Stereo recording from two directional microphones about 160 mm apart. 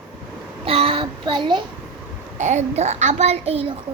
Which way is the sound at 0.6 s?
35° right (ahead or behind).